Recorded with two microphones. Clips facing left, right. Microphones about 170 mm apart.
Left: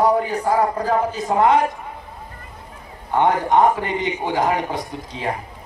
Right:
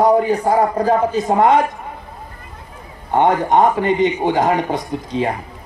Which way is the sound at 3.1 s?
20° right (ahead or behind).